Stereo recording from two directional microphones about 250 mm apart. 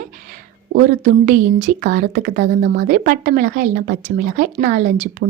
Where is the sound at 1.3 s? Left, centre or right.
Right.